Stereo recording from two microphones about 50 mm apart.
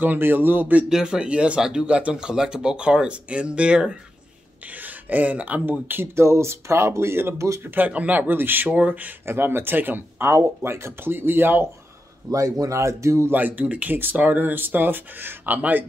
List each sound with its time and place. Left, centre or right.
0.0 s speech: right
0.8 s speech: centre
4.8 s speech: right
6.1 s speech: right
7.3 s speech: right
7.6 s speech: right
8.7 s speech: right
9.2 s speech: right
10.2 s speech: right
12.6 s speech: right
13.3 s speech: right